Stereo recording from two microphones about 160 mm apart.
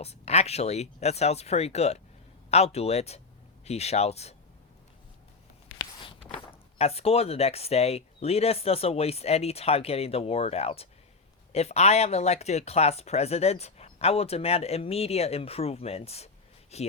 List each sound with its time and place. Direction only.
0.0 s speech: 40° left (ahead or behind)
5.7 s speech: 30° left (ahead or behind)